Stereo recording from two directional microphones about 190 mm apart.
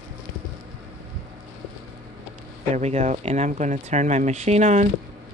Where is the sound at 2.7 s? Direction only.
35° right (ahead or behind).